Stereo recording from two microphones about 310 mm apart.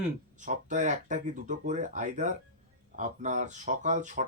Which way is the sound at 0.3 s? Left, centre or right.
Right.